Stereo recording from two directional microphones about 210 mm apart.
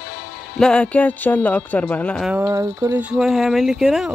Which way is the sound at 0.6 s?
5° left (ahead or behind).